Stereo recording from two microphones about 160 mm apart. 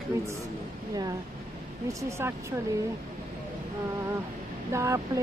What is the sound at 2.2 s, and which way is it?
Speech, 15° right (ahead or behind).